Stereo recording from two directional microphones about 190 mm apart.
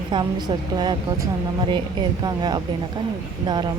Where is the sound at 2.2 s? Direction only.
20° right (ahead or behind).